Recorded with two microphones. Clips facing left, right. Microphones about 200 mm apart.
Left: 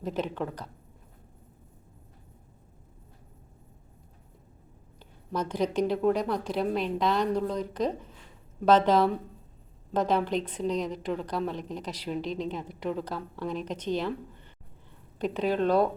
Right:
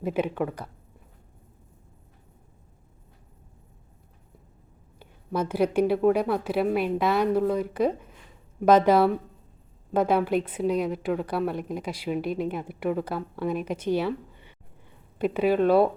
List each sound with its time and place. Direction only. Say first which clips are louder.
0.0 s a woman's voice: right 5 dB; 10° right (ahead or behind)
4.9 s a woman's voice: right 4 dB; 10° right (ahead or behind)